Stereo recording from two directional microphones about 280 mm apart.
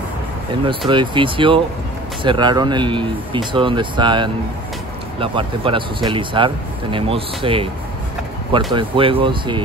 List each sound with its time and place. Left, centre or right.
0.7 s speech: centre
8.7 s speech: centre